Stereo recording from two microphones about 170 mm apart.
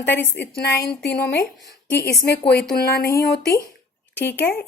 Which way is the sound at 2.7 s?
60° left (ahead or behind).